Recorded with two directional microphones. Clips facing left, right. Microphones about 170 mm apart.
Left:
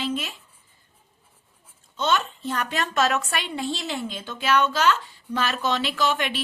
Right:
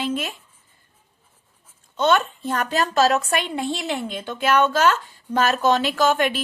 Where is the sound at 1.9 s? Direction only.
55° right (ahead or behind).